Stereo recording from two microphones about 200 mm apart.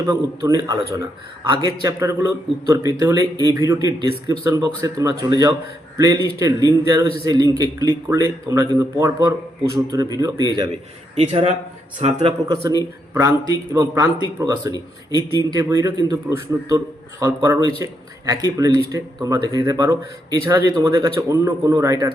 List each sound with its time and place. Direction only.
0.1 s a man's voice: 20° right (ahead or behind)
11.1 s a man's voice: 30° right (ahead or behind)